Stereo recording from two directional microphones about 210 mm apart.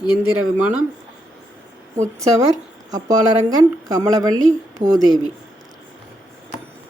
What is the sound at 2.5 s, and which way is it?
Speech, 35° right (ahead or behind).